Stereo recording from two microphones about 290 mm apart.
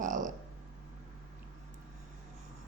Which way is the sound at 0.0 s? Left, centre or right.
Right.